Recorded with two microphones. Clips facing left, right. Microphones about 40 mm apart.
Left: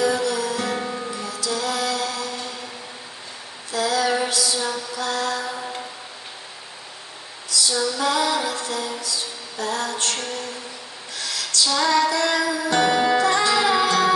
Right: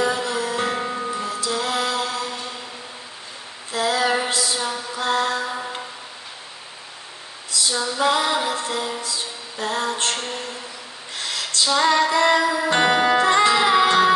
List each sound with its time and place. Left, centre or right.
0.0 s music: right
3.7 s mantra: right
7.4 s female singing: right
11.1 s music: right
13.2 s music: right